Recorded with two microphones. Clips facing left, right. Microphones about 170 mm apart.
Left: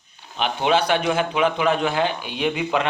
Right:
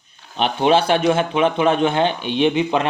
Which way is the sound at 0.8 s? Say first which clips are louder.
Right 4 dB; 25° right (ahead or behind).